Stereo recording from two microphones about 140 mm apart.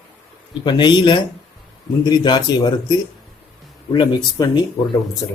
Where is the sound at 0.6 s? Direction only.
30° left (ahead or behind).